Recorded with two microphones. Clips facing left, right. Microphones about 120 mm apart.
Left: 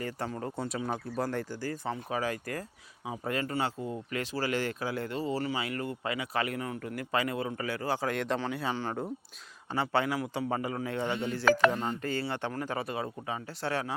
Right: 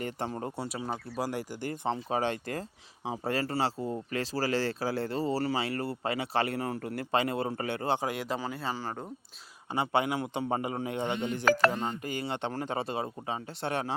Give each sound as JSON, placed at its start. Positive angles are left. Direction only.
{"t": 0.0, "sound": "speech", "side_deg": -25}
{"t": 0.5, "sound": "speech", "side_deg": -10}
{"t": 1.6, "sound": "speech", "side_deg": -20}
{"t": 8.0, "sound": "speech", "side_deg": -5}
{"t": 9.7, "sound": "speech", "side_deg": -20}